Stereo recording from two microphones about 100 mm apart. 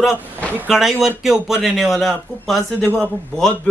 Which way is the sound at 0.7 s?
5° right (ahead or behind).